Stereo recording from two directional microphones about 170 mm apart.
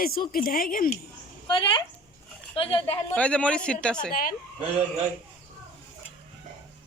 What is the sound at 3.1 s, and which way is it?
Speech, 5° left (ahead or behind).